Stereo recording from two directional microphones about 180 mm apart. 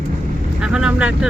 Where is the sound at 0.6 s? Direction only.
5° right (ahead or behind).